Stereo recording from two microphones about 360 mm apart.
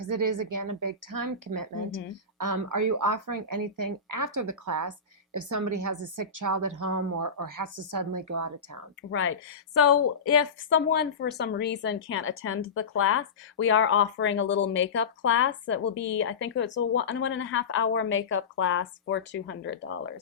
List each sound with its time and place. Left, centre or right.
0.0 s a woman's voice: right
9.0 s a woman's voice: left